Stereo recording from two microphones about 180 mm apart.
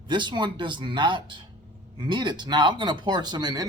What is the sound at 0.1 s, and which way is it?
Speech, 25° right (ahead or behind).